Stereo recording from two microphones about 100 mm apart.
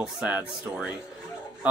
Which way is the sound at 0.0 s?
15° right (ahead or behind).